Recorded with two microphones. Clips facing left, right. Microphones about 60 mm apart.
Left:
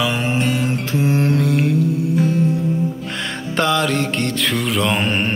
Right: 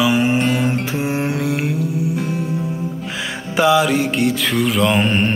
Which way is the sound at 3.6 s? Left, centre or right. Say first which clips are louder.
Right 4 dB; centre.